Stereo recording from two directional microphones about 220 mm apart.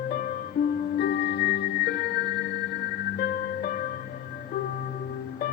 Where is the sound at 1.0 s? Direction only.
45° left (ahead or behind).